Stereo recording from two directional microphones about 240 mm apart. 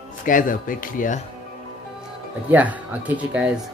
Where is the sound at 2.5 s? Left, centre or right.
Centre.